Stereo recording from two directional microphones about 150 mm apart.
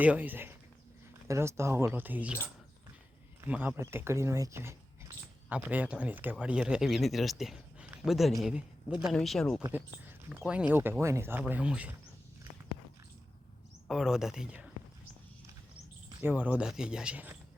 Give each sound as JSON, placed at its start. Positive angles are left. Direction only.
{"t": 0.0, "sound": "speech", "side_deg": -10}
{"t": 3.4, "sound": "speech", "side_deg": -10}
{"t": 13.8, "sound": "speech", "side_deg": 0}
{"t": 16.2, "sound": "speech", "side_deg": -10}